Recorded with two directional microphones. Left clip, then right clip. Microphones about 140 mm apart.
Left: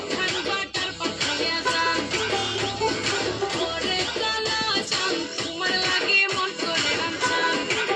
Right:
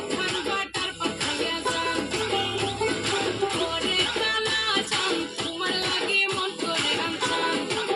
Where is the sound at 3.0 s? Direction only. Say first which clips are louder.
Even; 60° right (ahead or behind).